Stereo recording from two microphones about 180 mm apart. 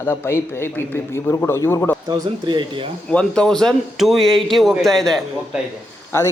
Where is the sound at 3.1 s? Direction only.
5° left (ahead or behind).